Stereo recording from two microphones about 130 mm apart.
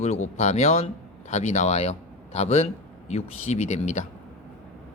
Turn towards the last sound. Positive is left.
turn(degrees=65)  # may be behind; listen again after turning